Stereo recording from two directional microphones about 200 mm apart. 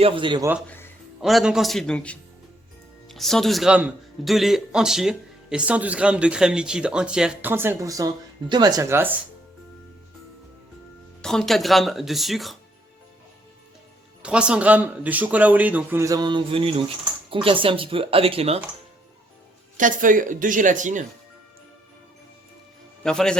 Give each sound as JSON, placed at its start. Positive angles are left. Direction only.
{"t": 0.0, "sound": "speech", "side_deg": -25}
{"t": 1.2, "sound": "a man's voice", "side_deg": 0}
{"t": 11.2, "sound": "a man's voice", "side_deg": 5}
{"t": 14.2, "sound": "speech", "side_deg": -5}
{"t": 19.7, "sound": "a woman's voice", "side_deg": -40}
{"t": 23.0, "sound": "a man's voice", "side_deg": 5}